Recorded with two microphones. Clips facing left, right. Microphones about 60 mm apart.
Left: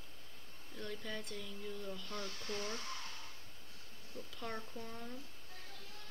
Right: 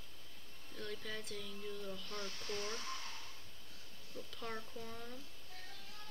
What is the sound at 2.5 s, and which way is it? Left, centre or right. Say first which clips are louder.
Speech: left 1 dB; left.